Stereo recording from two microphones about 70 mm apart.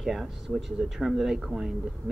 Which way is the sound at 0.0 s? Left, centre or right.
Centre.